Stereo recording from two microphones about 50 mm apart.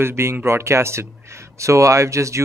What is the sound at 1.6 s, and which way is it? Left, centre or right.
Speech, right.